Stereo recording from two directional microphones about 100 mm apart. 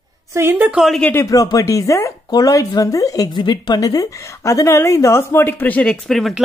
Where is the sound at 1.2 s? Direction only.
35° left (ahead or behind).